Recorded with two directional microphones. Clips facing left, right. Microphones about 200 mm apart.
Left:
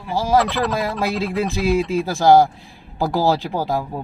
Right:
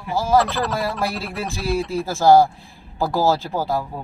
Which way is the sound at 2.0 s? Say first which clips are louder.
Right 1 dB; 15° left (ahead or behind).